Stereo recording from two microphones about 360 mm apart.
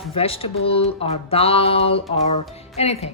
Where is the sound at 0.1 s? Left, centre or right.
Centre.